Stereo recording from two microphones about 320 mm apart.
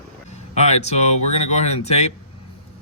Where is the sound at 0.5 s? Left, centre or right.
Centre.